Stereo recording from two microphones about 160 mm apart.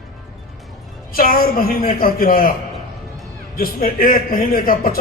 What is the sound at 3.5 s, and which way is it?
A man's voice, 65° left (ahead or behind).